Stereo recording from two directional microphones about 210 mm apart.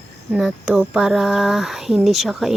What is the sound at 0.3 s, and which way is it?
Speech, 5° right (ahead or behind).